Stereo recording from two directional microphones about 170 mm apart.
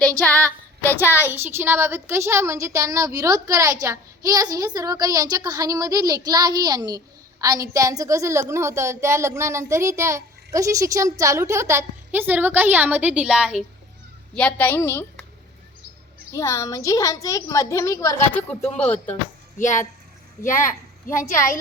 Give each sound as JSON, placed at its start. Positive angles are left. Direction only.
{"t": 0.2, "sound": "child singing", "side_deg": 10}
{"t": 1.1, "sound": "a child's voice", "side_deg": -10}
{"t": 14.3, "sound": "a woman's voice", "side_deg": 10}
{"t": 16.3, "sound": "a woman's voice", "side_deg": 15}
{"t": 19.5, "sound": "a woman's voice", "side_deg": 50}